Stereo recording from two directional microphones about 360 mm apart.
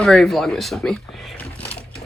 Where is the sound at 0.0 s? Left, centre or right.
Centre.